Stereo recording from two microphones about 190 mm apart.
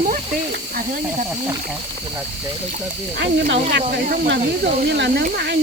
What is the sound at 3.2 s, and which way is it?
Speech, 65° right (ahead or behind).